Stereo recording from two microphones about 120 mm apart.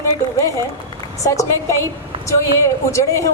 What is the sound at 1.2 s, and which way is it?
A woman's voice, 25° left (ahead or behind).